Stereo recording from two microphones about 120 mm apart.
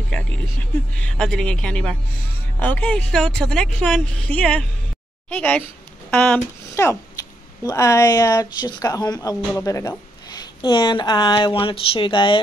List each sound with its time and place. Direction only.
0.1 s a woman's voice: 10° left (ahead or behind)
6.7 s a sound: 25° left (ahead or behind)
7.6 s speech: 25° left (ahead or behind); by 12.4 s 45° left (ahead or behind)